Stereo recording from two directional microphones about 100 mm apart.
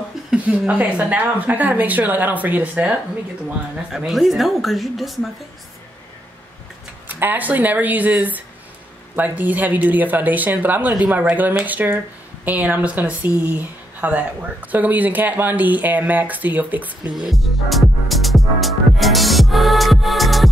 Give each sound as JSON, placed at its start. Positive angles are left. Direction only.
{"t": 0.3, "sound": "a woman's voice", "side_deg": -10}
{"t": 3.9, "sound": "a woman's voice", "side_deg": 0}
{"t": 7.1, "sound": "a woman's voice", "side_deg": -20}
{"t": 17.1, "sound": "music", "side_deg": 0}